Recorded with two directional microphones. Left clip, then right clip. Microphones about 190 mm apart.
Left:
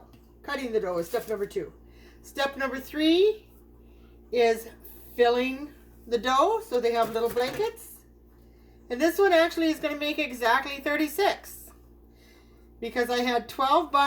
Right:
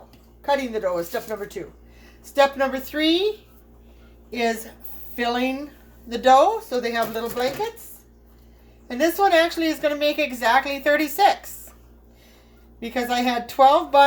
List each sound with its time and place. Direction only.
0.4 s a woman's voice: 20° right (ahead or behind)
8.9 s a woman's voice: 20° right (ahead or behind)
12.8 s a woman's voice: 20° right (ahead or behind)